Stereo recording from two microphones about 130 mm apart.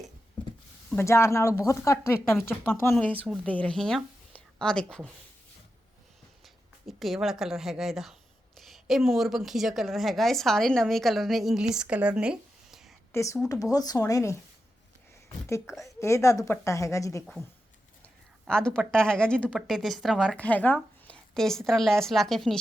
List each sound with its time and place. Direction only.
0.9 s a woman's voice: 20° left (ahead or behind)
6.4 s a woman's voice: centre (ahead or behind)
13.1 s speech: 20° left (ahead or behind)
15.4 s a woman's voice: 20° left (ahead or behind)
18.0 s speech: 5° left (ahead or behind)